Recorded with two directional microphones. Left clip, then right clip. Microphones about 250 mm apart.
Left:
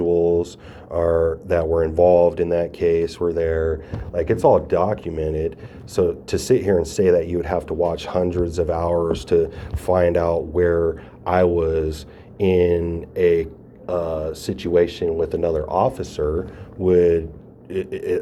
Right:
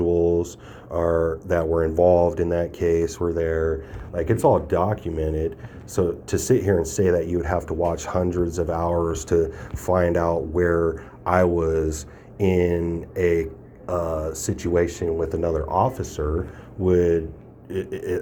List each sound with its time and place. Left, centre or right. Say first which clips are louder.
0.0 s speech: left 2 dB; right